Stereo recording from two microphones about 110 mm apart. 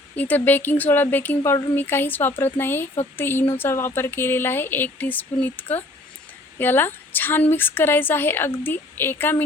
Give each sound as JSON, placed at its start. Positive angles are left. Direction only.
{"t": 0.2, "sound": "speech", "side_deg": 15}